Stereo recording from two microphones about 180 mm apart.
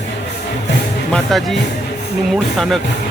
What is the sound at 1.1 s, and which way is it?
Speech, centre (ahead or behind).